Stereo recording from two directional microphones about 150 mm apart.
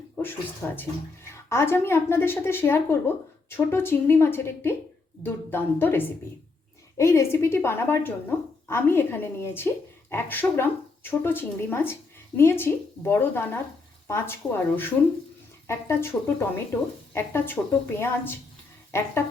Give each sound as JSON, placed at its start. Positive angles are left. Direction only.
{"t": 0.6, "sound": "speech", "side_deg": 15}